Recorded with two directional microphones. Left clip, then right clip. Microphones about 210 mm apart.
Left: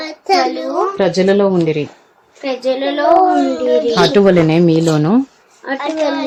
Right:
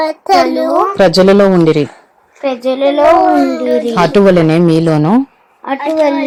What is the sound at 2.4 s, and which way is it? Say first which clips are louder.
Speech: right 3 dB; 30° right (ahead or behind).